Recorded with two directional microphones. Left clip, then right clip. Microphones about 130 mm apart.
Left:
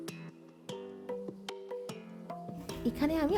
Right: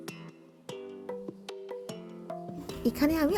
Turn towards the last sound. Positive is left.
turn(degrees=-15)  # may be behind; listen again after turning